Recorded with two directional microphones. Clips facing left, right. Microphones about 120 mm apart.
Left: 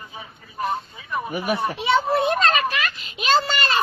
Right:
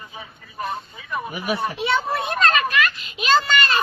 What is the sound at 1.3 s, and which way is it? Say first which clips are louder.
Speech: left 2 dB; 50° left (ahead or behind).